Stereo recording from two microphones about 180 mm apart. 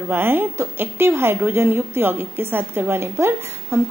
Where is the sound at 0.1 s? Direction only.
10° right (ahead or behind).